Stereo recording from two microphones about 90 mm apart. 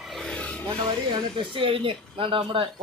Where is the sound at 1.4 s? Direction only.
85° right.